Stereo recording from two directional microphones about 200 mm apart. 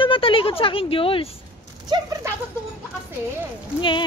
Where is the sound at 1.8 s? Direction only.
20° right (ahead or behind).